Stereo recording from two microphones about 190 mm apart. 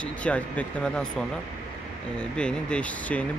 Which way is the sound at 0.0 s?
5° left (ahead or behind).